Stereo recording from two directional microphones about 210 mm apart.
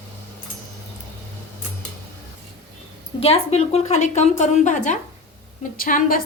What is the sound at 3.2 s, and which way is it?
A woman's voice, 30° left (ahead or behind).